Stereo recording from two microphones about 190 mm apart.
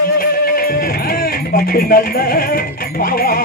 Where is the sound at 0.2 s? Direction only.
50° left (ahead or behind).